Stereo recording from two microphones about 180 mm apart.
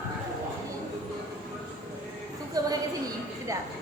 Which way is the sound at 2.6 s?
20° right (ahead or behind).